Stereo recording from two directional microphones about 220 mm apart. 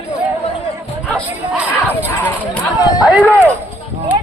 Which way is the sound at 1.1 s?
5° left (ahead or behind).